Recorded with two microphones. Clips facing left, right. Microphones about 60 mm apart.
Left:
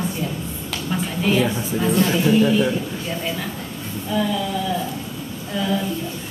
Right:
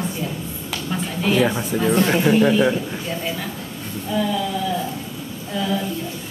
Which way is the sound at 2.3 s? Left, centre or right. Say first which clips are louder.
Right 1 dB; right.